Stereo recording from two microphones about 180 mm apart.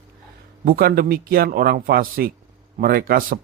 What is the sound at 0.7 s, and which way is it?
Speech, 55° right (ahead or behind).